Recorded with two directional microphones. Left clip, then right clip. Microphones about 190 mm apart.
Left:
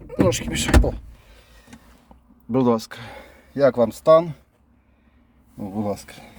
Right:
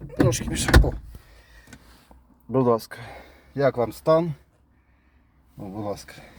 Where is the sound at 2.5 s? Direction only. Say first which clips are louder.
Left 1 dB; 30° left (ahead or behind).